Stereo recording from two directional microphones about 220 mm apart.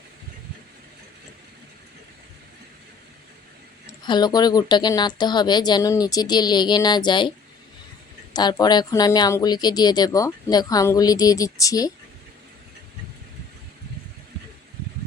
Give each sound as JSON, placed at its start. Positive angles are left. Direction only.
{"t": 4.0, "sound": "a woman's voice", "side_deg": 20}